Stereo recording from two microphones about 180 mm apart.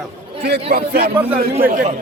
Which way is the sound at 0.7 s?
60° right (ahead or behind).